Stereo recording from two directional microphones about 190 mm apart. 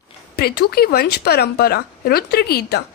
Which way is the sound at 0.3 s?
55° left (ahead or behind).